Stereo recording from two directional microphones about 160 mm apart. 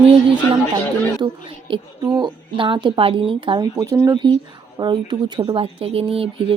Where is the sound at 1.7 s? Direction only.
25° right (ahead or behind).